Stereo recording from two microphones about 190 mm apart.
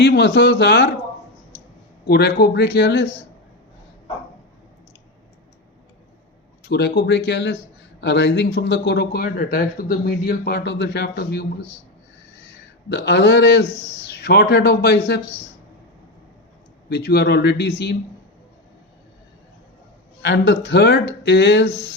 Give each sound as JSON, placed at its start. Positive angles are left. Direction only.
{"t": 0.0, "sound": "speech", "side_deg": 65}
{"t": 2.0, "sound": "speech", "side_deg": 60}
{"t": 6.7, "sound": "speech", "side_deg": 60}
{"t": 12.9, "sound": "speech", "side_deg": 65}
{"t": 16.9, "sound": "speech", "side_deg": 60}
{"t": 20.2, "sound": "speech", "side_deg": 65}